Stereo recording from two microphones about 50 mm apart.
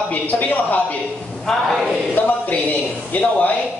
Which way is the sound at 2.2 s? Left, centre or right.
Left.